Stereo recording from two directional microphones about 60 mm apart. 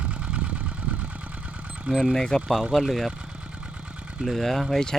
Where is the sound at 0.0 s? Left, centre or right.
Right.